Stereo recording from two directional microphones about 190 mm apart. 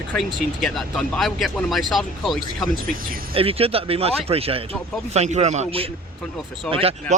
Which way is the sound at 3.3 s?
30° right (ahead or behind).